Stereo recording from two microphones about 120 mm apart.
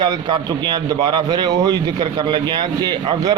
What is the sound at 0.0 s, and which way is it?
A man's voice, 35° right (ahead or behind).